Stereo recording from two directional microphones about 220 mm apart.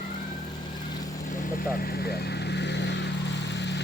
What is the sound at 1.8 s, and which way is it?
Vehicle, 45° left (ahead or behind).